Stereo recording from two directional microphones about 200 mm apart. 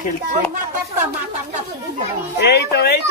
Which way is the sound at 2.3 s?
55° left (ahead or behind).